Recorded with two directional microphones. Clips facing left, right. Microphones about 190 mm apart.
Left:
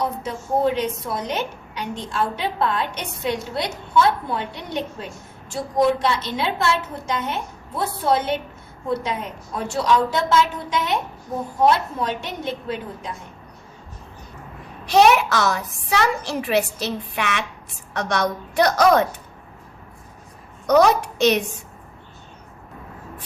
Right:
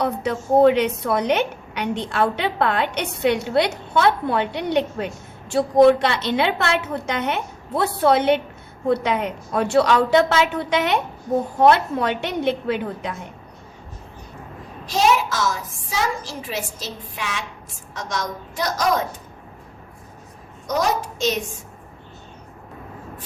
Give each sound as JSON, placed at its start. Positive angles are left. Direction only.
{"t": 0.0, "sound": "a woman's voice", "side_deg": -65}
{"t": 14.8, "sound": "a woman's voice", "side_deg": 65}
{"t": 20.7, "sound": "a woman's voice", "side_deg": 65}